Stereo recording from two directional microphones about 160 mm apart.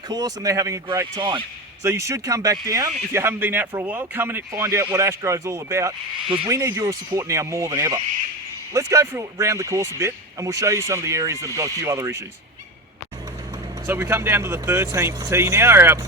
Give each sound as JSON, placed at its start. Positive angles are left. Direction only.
{"t": 0.1, "sound": "speech", "side_deg": -25}
{"t": 1.8, "sound": "speech", "side_deg": -20}
{"t": 13.8, "sound": "speech", "side_deg": -15}